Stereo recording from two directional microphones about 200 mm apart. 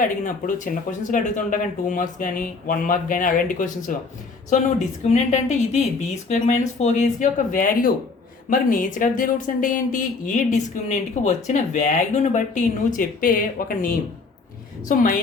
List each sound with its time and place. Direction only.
0.4 s speech: 40° left (ahead or behind)
5.0 s a woman's voice: 35° left (ahead or behind)